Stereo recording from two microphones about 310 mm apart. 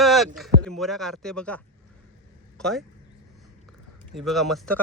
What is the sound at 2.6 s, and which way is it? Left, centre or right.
Speech, centre.